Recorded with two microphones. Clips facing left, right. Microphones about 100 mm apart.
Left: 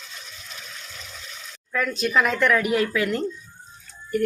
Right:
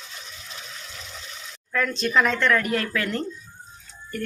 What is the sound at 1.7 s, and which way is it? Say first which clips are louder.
Speech: even; 5° left (ahead or behind).